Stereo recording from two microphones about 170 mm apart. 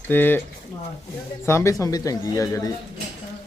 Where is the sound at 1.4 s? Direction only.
15° left (ahead or behind).